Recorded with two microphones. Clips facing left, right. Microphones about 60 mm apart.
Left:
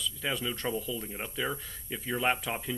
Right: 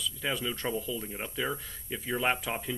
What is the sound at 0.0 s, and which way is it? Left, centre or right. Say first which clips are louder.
Speech: even; centre.